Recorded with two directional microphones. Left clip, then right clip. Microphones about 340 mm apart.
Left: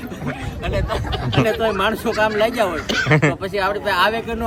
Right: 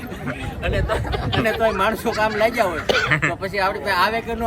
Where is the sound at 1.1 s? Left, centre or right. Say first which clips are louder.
Even; centre.